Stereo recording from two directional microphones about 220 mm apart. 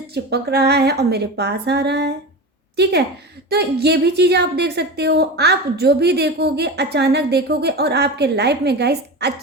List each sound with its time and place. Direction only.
0.1 s a woman's voice: 45° right (ahead or behind)
3.5 s a woman's voice: 45° right (ahead or behind)